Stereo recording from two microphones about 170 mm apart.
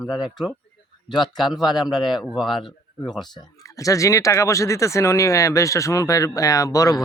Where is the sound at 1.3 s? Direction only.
Centre (ahead or behind).